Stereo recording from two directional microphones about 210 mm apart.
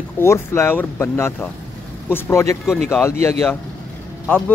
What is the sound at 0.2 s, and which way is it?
Speech, 10° left (ahead or behind).